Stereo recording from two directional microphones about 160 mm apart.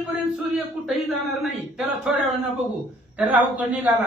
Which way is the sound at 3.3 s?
10° right (ahead or behind).